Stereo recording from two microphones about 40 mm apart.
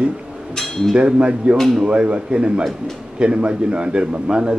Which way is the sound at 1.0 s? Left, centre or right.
Right.